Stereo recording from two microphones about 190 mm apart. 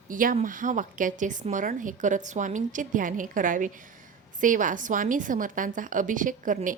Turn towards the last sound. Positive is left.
turn(degrees=-45)  # may be behind; listen again after turning